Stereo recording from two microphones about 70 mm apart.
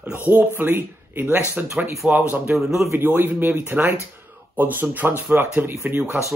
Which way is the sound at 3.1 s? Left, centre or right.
Right.